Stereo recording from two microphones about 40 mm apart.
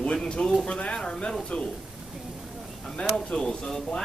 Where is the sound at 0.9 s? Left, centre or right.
Centre.